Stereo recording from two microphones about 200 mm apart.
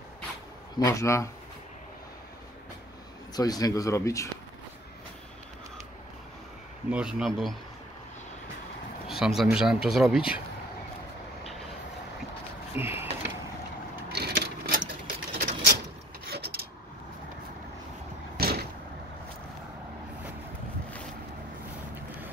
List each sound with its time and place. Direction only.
0.7 s speech: 15° left (ahead or behind)
3.3 s speech: 20° left (ahead or behind)
6.9 s speech: 5° right (ahead or behind)
9.1 s speech: centre (ahead or behind)
12.7 s a sound: 10° right (ahead or behind)
14.1 s sewing machine: 55° right (ahead or behind)
16.3 s a sound: 55° right (ahead or behind)
18.4 s vehicle: 50° right (ahead or behind)